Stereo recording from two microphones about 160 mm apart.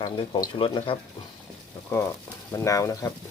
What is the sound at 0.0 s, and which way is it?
Speech, 25° left (ahead or behind).